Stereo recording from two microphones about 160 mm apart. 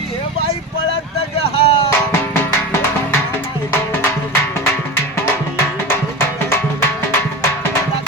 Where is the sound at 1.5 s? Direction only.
35° left (ahead or behind).